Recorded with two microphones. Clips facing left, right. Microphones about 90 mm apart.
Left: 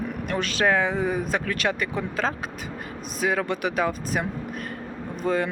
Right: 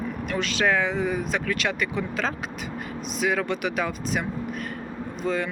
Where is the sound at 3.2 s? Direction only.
35° left (ahead or behind).